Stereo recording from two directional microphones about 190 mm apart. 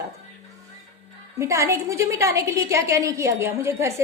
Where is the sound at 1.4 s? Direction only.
15° right (ahead or behind).